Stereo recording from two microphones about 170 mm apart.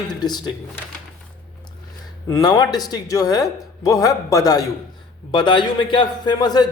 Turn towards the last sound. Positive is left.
turn(degrees=25)  # may be behind; listen again after turning